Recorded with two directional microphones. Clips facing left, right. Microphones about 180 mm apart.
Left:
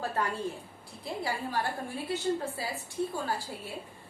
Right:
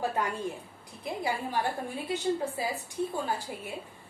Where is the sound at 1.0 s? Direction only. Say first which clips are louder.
Right 2 dB; 20° right (ahead or behind).